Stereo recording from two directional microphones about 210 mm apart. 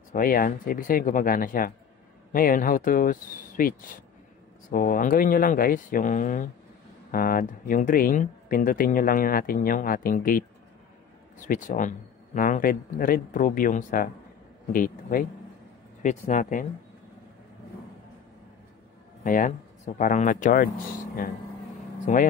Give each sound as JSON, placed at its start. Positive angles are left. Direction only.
{"t": 0.1, "sound": "speech", "side_deg": 40}
{"t": 19.2, "sound": "speech", "side_deg": 40}